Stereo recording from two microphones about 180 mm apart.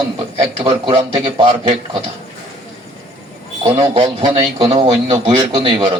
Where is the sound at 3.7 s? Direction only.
25° right (ahead or behind).